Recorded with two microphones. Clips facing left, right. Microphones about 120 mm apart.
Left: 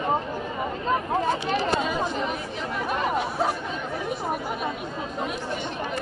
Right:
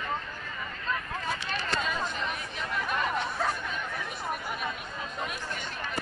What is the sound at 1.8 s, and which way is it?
Chatter, 20° left (ahead or behind).